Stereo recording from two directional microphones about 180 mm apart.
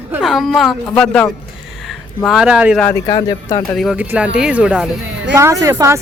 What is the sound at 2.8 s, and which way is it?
Speech, 15° left (ahead or behind).